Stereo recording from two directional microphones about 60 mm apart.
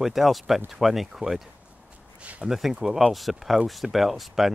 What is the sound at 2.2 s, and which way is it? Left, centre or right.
Speech, right.